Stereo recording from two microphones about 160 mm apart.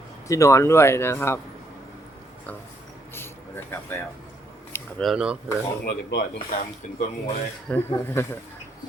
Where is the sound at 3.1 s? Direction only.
15° left (ahead or behind).